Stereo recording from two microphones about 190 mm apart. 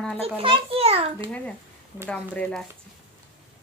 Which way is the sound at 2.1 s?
5° left (ahead or behind).